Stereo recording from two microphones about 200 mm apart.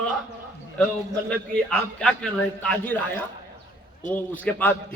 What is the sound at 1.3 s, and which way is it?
A man's voice, 5° left (ahead or behind).